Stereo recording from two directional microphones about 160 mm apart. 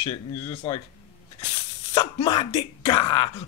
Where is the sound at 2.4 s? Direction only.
40° left (ahead or behind).